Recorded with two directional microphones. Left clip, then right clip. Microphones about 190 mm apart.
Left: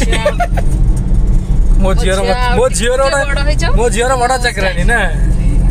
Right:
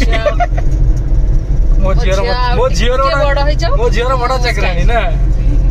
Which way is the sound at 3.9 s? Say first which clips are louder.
Left 2 dB; 55° left (ahead or behind).